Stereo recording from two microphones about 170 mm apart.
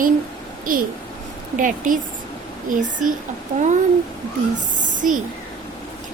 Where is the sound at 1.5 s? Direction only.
50° right (ahead or behind).